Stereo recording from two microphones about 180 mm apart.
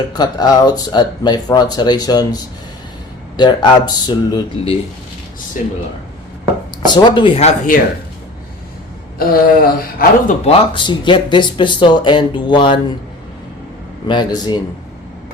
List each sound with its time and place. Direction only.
0.1 s speech: 20° left (ahead or behind)
6.8 s speech: 25° left (ahead or behind)
9.1 s speech: 55° left (ahead or behind)
10.4 s speech: 25° left (ahead or behind)
14.1 s speech: 25° left (ahead or behind)